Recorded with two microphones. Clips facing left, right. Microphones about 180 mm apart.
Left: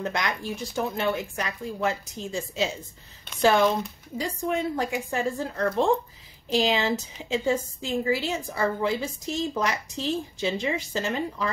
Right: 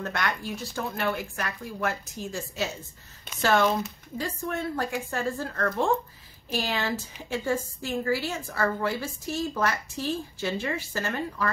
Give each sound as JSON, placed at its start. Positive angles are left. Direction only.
{"t": 0.0, "sound": "a woman's voice", "side_deg": 15}
{"t": 6.7, "sound": "a woman's voice", "side_deg": 20}